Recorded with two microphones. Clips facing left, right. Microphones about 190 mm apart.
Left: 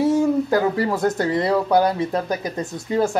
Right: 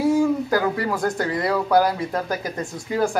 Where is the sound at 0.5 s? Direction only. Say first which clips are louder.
Left 2 dB; 25° left (ahead or behind).